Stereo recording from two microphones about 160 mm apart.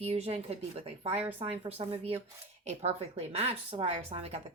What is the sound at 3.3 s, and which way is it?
A woman's voice, 40° right (ahead or behind).